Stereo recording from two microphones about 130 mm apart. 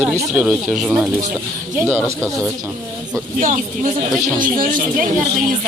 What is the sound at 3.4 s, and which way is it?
Speech, 80° right.